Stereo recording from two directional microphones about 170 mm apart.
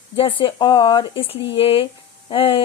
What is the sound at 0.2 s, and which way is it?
Speech, 30° left (ahead or behind).